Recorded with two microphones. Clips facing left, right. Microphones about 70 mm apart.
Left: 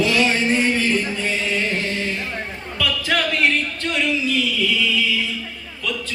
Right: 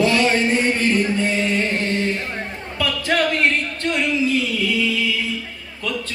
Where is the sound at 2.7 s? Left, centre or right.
Right.